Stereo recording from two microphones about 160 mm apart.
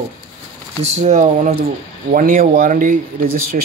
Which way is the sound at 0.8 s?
45° right (ahead or behind).